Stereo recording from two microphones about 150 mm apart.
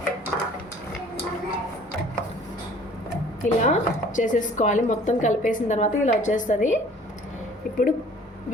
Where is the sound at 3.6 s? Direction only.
55° left (ahead or behind).